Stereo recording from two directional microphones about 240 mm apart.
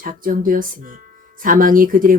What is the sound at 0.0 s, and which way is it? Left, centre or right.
Speech, right.